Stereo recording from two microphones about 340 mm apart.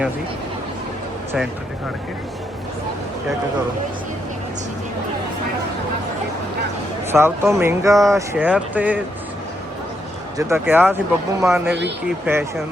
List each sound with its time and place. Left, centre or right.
7.1 s speech: centre
10.3 s speech: centre
11.7 s speech: right
12.0 s speech: centre